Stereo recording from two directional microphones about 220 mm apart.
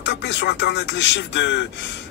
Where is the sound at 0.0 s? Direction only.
50° left (ahead or behind).